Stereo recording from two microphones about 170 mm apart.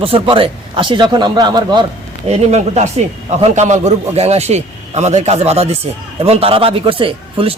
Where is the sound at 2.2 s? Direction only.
40° right (ahead or behind).